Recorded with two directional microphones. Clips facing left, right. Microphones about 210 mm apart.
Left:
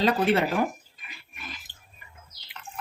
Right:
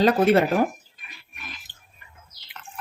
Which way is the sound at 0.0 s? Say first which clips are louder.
Right 5 dB; 45° right (ahead or behind).